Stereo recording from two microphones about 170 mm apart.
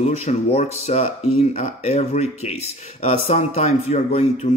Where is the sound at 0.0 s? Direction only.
40° left (ahead or behind).